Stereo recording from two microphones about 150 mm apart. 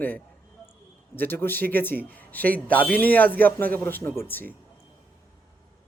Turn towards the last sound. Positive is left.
turn(degrees=15)  # may be behind; listen again after turning